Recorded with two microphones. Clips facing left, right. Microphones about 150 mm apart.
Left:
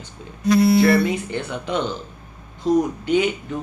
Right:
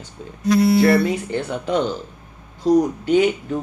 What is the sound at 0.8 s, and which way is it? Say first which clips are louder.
Speech: right 1 dB; 40° right (ahead or behind).